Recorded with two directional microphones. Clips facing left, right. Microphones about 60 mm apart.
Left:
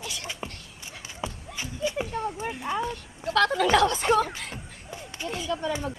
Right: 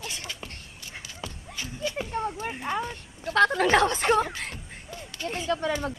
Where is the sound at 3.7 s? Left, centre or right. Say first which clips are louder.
Even; right.